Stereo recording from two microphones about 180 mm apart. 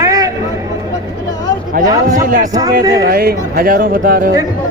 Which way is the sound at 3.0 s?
55° right (ahead or behind).